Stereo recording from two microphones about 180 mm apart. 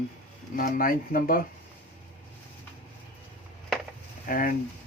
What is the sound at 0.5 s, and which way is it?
Speech, 50° left (ahead or behind).